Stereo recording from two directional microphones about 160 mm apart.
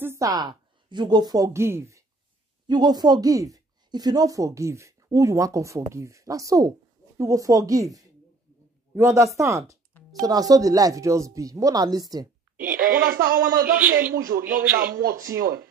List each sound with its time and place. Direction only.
0.0 s a woman's voice: 20° right (ahead or behind)
12.5 s speech: 60° right (ahead or behind)
13.2 s a man's voice: 20° right (ahead or behind)
14.5 s a man's voice: 65° right (ahead or behind)